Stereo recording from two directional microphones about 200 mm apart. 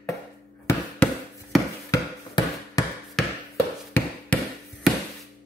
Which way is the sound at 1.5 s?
Centre (ahead or behind).